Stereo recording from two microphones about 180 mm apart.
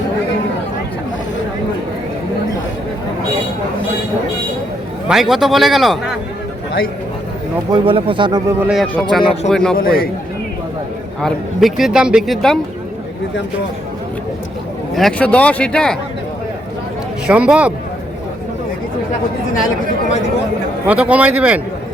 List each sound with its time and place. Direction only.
5.0 s speech: centre (ahead or behind)
7.7 s speech: 30° right (ahead or behind)
8.6 s speech: centre (ahead or behind)
9.7 s a man's voice: 55° left (ahead or behind)
11.2 s speech: centre (ahead or behind)
14.9 s speech: 5° left (ahead or behind)
17.2 s a man's voice: 5° right (ahead or behind)
20.8 s a man's voice: 5° right (ahead or behind)